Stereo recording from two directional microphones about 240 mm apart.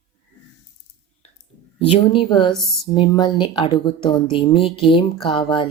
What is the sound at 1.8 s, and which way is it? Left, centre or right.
Speech, left.